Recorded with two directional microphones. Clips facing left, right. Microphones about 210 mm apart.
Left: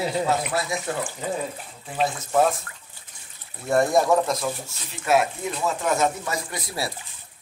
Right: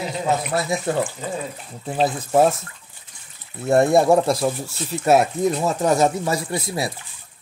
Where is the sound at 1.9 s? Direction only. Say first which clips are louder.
Right 4 dB; 30° right (ahead or behind).